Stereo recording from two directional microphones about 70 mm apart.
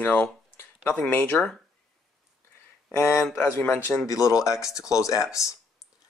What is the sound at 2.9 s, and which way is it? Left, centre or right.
Speech, left.